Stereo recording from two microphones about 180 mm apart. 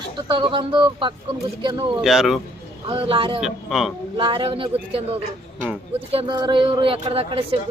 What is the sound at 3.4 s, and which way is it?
Speech, centre (ahead or behind).